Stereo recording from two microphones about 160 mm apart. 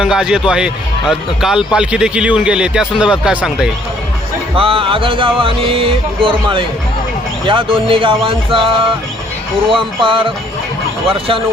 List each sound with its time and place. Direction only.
0.0 s speech: 5° right (ahead or behind)
4.5 s music: 35° right (ahead or behind)